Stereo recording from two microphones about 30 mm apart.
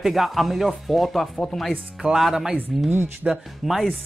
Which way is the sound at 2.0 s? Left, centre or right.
Right.